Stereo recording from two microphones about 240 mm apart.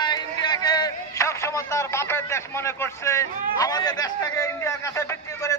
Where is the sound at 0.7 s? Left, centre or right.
Centre.